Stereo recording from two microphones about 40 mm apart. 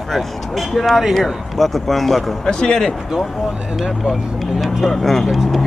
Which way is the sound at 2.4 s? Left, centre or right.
Left.